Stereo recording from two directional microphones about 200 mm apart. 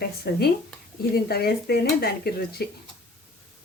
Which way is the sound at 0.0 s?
50° left (ahead or behind).